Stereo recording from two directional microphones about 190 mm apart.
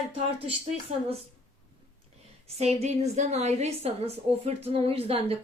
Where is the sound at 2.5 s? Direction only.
35° right (ahead or behind).